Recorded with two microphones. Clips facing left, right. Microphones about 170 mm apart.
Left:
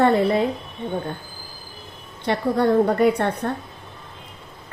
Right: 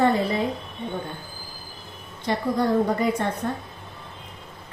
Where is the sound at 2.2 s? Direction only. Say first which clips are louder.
Left 3 dB; 65° left (ahead or behind).